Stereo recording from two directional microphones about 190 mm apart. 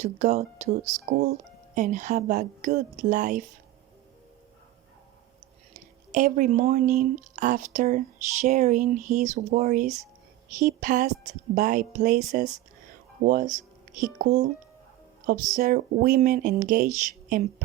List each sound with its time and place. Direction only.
0.0 s speech: 35° right (ahead or behind)
5.7 s speech: 40° right (ahead or behind)
15.5 s speech: 45° right (ahead or behind)